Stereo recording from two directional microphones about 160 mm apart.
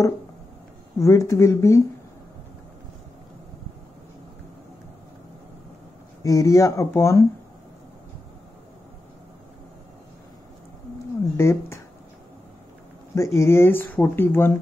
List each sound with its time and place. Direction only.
0.9 s speech: 20° left (ahead or behind)
6.2 s speech: 20° left (ahead or behind)
11.3 s speech: 15° left (ahead or behind)
13.1 s speech: 15° left (ahead or behind)